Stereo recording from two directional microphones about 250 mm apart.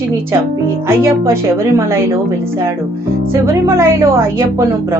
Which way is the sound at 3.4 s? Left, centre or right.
Centre.